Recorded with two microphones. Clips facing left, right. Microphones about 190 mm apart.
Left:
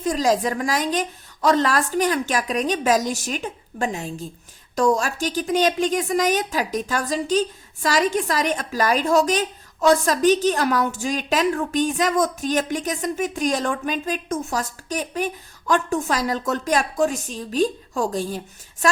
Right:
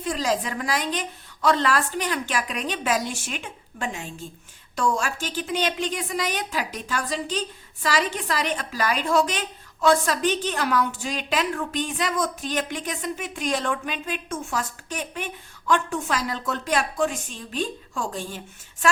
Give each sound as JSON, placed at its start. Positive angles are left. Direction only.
{"t": 0.0, "sound": "a woman's voice", "side_deg": 45}